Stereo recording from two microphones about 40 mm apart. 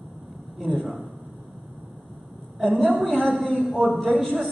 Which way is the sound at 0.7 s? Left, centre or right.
Centre.